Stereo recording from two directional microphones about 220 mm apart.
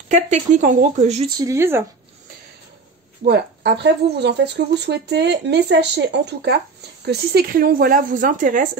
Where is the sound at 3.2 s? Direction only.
50° right (ahead or behind).